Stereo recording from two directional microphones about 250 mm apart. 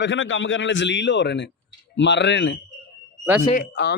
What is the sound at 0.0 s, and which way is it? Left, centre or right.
Speech, left.